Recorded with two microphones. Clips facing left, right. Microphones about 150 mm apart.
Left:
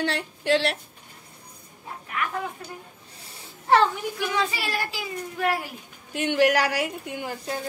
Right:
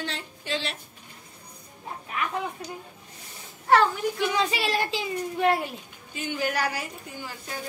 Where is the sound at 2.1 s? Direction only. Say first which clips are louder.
Even; 20° right (ahead or behind).